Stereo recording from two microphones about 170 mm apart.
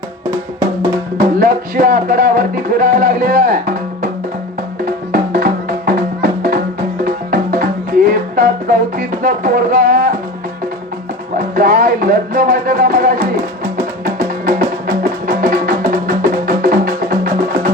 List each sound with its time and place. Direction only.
0.8 s music: 55° right (ahead or behind)
11.3 s music: 55° right (ahead or behind)